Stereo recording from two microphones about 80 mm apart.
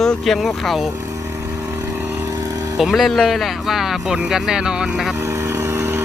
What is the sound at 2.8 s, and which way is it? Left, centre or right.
Speech, centre.